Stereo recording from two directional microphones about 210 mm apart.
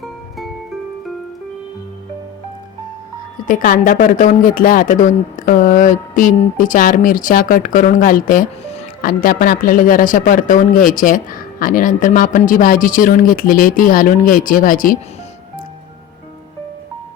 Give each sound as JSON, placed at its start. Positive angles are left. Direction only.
{"t": 3.4, "sound": "a woman's voice", "side_deg": 40}